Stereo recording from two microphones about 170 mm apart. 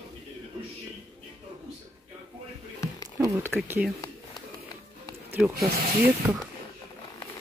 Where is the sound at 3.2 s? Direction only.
15° right (ahead or behind).